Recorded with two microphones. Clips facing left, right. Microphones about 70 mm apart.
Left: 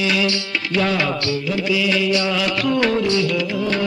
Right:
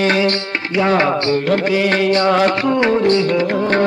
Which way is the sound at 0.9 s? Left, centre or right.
Right.